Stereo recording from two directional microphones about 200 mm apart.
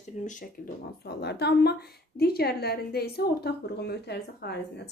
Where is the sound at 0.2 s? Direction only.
40° left (ahead or behind).